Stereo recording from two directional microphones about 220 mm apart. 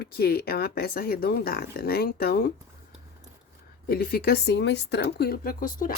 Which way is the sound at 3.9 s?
45° left (ahead or behind).